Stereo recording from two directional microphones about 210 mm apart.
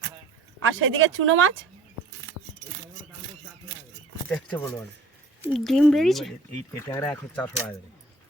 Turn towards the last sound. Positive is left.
turn(degrees=5)  # may be behind; listen again after turning